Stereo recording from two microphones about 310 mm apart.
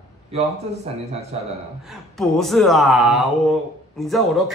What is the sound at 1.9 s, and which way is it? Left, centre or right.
Speech, centre.